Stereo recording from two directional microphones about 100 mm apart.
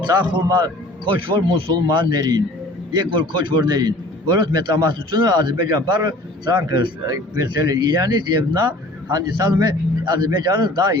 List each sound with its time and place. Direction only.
0.1 s a man's voice: 40° right (ahead or behind)